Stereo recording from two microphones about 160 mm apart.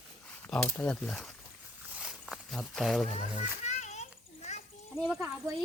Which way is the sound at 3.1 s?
45° left (ahead or behind).